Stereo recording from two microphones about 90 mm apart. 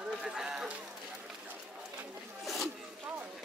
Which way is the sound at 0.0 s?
10° right (ahead or behind).